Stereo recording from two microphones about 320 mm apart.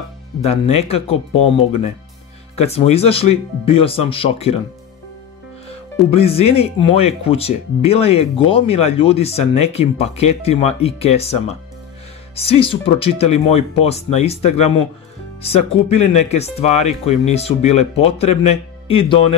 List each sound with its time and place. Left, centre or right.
0.4 s speech: centre
6.0 s speech: centre